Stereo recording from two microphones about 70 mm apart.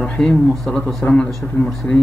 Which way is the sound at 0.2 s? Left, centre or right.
Centre.